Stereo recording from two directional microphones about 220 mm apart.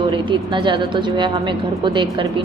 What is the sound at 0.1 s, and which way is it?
Speech, 20° right (ahead or behind).